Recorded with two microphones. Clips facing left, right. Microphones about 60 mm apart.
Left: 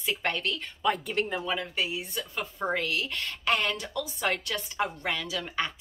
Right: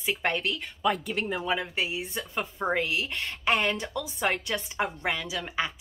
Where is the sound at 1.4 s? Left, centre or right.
Centre.